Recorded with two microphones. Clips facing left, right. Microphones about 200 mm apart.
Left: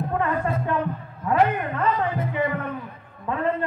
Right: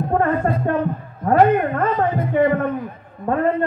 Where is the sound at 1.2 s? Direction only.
50° right (ahead or behind).